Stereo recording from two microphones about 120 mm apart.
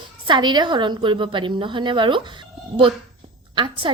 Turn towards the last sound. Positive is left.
turn(degrees=-40)  # may be behind; listen again after turning